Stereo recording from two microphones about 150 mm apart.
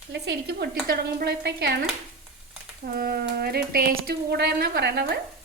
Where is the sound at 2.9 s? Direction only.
90° right.